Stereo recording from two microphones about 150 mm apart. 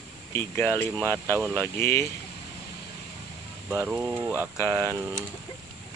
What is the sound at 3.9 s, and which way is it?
Speech, 10° right (ahead or behind).